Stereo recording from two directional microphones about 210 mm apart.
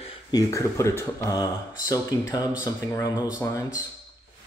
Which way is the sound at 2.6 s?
15° left (ahead or behind).